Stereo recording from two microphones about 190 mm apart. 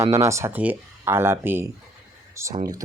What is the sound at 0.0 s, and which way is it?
Speech, 15° right (ahead or behind).